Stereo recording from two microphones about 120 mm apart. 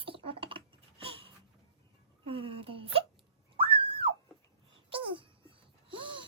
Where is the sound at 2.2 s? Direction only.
50° right (ahead or behind).